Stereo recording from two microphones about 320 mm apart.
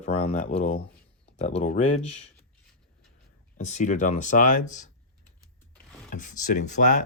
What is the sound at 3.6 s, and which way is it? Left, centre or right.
Speech, left.